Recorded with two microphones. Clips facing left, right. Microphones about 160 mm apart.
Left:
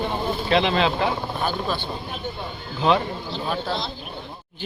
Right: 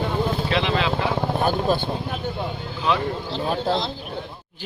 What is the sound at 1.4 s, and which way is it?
Speech, 45° right (ahead or behind).